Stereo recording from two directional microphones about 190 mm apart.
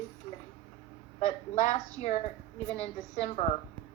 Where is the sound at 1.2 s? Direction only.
40° left (ahead or behind).